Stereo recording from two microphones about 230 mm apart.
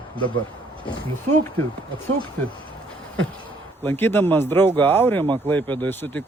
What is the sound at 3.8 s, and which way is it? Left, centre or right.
A man's voice, centre.